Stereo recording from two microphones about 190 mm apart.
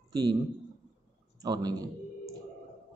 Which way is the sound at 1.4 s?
20° right (ahead or behind).